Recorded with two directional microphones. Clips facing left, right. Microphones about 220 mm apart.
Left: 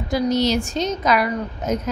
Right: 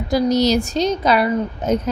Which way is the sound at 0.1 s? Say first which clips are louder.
Right 3 dB; 40° right (ahead or behind).